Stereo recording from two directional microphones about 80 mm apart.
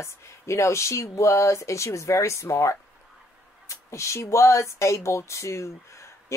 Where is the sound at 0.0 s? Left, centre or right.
Left.